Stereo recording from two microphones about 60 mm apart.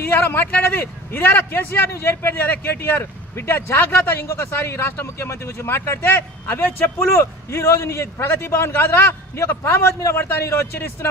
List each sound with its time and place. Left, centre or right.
0.0 s a man's voice: left
7.0 s a man's voice: left